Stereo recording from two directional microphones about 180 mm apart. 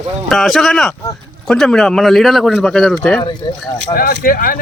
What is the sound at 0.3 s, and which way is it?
Speech, centre (ahead or behind).